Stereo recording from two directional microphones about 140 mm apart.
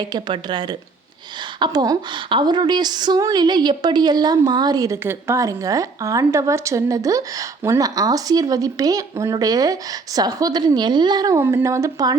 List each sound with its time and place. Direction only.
0.0 s a woman's voice: 30° right (ahead or behind)
11.3 s a woman's voice: 15° right (ahead or behind)